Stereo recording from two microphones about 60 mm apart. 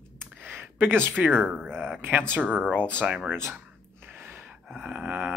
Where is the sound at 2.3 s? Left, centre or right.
Right.